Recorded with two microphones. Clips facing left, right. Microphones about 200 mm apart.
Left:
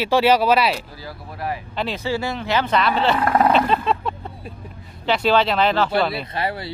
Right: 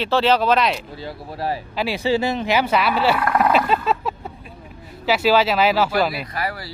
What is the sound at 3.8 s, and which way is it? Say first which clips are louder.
Vehicle: even; 5° right (ahead or behind).